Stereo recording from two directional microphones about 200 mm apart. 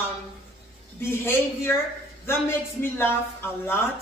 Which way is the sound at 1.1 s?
10° left (ahead or behind).